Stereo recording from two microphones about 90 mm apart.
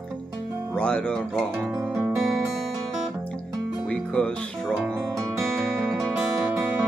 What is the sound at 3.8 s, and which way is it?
Music, 10° left (ahead or behind).